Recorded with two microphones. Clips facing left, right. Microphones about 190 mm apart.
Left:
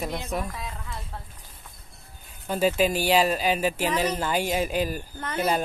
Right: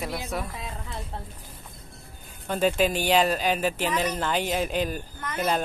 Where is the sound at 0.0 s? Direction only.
5° right (ahead or behind).